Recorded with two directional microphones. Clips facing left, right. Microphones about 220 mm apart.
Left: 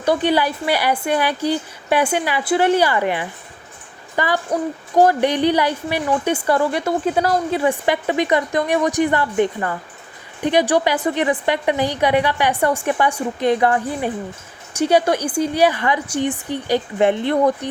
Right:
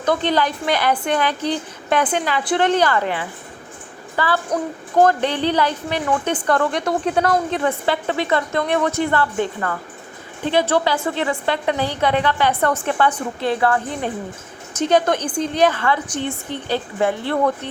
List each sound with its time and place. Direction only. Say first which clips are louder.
0.0 s a woman's voice: left 2 dB; 10° left (ahead or behind)